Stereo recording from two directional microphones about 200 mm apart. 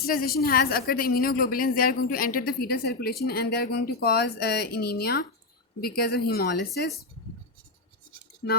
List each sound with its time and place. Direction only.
0.0 s a woman's voice: 45° left (ahead or behind)